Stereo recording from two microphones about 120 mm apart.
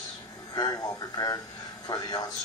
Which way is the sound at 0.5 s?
30° left (ahead or behind).